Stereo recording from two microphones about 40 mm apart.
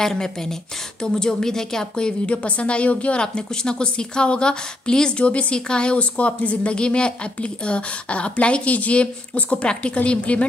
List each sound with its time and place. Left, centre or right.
0.0 s speech: centre
5.2 s a woman's voice: left